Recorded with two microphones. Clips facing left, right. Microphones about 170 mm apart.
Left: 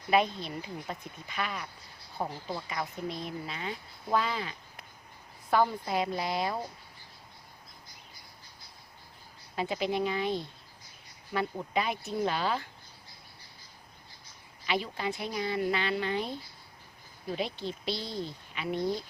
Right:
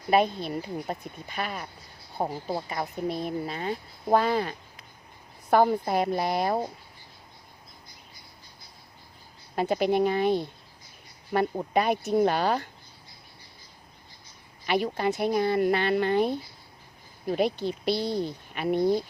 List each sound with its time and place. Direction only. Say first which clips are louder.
0.1 s speech: right 4 dB; 45° right (ahead or behind)
3.1 s speech: right 7 dB; 50° right (ahead or behind)
9.6 s speech: right 7 dB; 55° right (ahead or behind)
14.7 s speech: right 7 dB; 50° right (ahead or behind)
17.8 s a woman's voice: right 9 dB; 65° right (ahead or behind)
18.5 s speech: right 8 dB; 50° right (ahead or behind)